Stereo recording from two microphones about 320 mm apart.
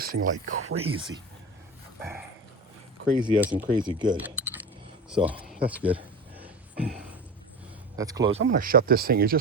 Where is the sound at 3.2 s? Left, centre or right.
Centre.